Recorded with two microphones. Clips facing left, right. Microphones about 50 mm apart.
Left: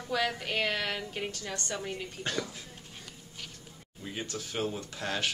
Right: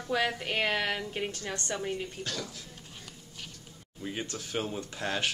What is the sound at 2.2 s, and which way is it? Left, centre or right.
Speech, left.